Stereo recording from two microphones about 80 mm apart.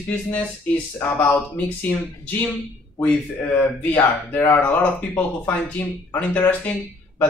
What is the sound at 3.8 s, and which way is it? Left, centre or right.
Speech, left.